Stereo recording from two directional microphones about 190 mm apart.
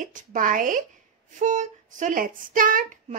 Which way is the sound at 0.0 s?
45° right (ahead or behind).